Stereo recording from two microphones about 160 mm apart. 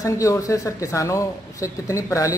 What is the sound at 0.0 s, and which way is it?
Speech, 20° left (ahead or behind).